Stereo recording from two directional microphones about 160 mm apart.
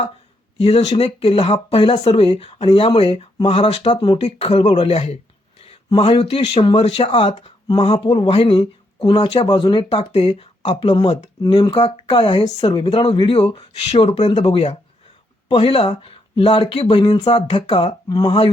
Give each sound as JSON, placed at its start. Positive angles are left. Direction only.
{"t": 0.6, "sound": "speech", "side_deg": 40}
{"t": 4.2, "sound": "speech", "side_deg": 40}
{"t": 4.6, "sound": "speech", "side_deg": 30}
{"t": 4.9, "sound": "speech", "side_deg": 40}
{"t": 7.7, "sound": "speech", "side_deg": 25}